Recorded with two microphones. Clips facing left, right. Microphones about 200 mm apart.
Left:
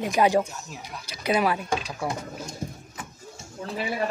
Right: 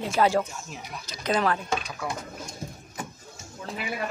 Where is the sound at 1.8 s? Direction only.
30° left (ahead or behind).